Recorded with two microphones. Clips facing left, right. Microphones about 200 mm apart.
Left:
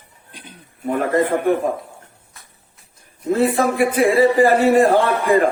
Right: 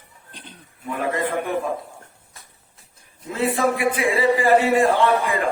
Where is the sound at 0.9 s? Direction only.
45° left (ahead or behind).